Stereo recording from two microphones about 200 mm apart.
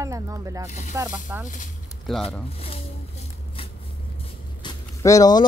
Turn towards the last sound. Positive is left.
turn(degrees=15)  # may be behind; listen again after turning